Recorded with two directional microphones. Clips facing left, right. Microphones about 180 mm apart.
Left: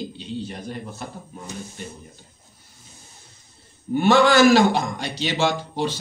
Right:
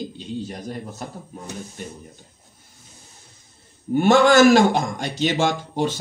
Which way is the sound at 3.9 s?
45° right (ahead or behind).